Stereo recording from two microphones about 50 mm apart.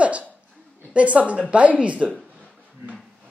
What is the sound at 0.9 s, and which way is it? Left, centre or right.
A woman's voice, right.